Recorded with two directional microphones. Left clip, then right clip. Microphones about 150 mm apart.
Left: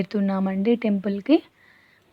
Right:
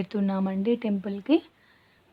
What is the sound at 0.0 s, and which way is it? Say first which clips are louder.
A woman's voice: left 4 dB; 15° left (ahead or behind).